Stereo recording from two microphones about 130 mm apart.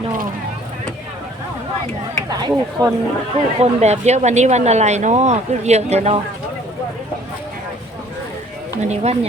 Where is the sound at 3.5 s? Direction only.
55° right (ahead or behind).